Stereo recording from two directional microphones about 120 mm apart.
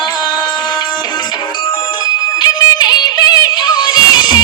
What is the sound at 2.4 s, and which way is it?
Music, 35° left (ahead or behind).